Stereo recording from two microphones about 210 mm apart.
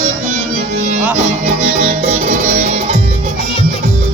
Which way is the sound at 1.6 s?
30° right (ahead or behind).